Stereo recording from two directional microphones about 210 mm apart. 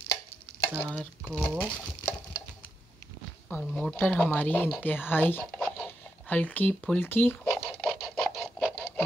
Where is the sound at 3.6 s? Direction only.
5° left (ahead or behind).